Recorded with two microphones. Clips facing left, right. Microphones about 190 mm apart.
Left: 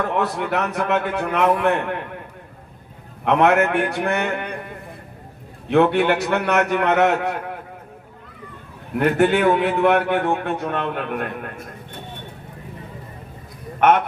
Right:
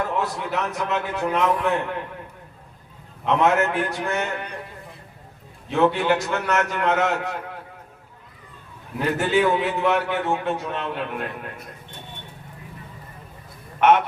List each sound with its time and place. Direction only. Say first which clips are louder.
0.2 s a man's voice: left 4 dB; 60° left (ahead or behind)
3.2 s a man's voice: left 3 dB; 60° left (ahead or behind)
5.6 s a man's voice: left 4 dB; 60° left (ahead or behind)
9.0 s a man's voice: left 4 dB; 60° left (ahead or behind)
13.7 s a man's voice: left 1 dB; 50° left (ahead or behind)